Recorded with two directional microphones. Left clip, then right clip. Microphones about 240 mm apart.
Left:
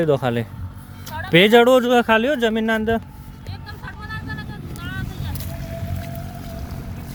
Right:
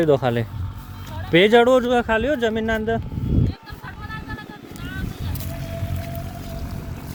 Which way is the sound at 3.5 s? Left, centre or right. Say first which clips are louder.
Left 2 dB; left.